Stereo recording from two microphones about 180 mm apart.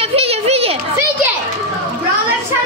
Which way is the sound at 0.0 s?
30° right (ahead or behind).